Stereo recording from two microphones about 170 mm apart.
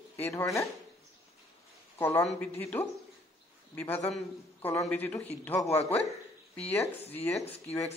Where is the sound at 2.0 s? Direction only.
10° left (ahead or behind).